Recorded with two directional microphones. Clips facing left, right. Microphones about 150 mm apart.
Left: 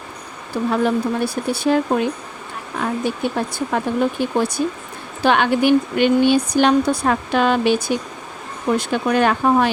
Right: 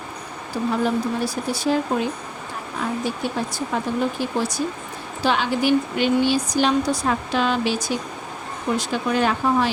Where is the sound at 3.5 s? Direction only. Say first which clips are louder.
Left 4 dB; 55° left (ahead or behind).